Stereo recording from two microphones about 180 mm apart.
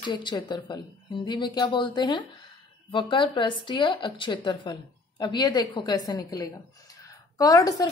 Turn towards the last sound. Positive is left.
turn(degrees=20)  # may be behind; listen again after turning